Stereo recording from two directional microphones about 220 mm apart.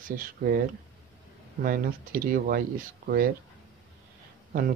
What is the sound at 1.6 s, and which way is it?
Speech, 40° right (ahead or behind).